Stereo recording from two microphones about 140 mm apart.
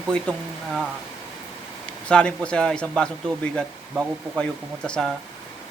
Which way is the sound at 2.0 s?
5° left (ahead or behind).